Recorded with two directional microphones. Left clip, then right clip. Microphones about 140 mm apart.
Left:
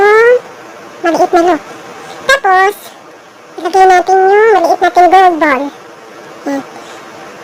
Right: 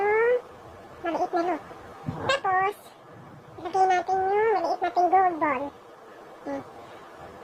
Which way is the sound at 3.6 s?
40° left (ahead or behind).